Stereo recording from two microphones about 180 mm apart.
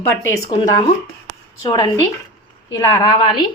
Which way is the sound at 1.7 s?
25° left (ahead or behind).